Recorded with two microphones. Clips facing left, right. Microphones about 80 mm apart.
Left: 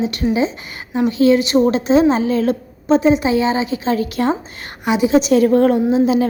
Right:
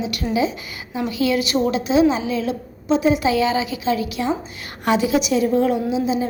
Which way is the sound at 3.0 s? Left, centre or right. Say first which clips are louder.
Left 1 dB; left.